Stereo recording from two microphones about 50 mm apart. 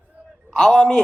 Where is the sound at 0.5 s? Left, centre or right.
Centre.